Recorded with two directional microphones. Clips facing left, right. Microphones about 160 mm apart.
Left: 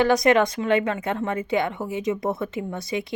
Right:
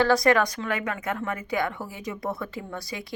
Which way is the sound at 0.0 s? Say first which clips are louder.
Left 2 dB; 20° left (ahead or behind).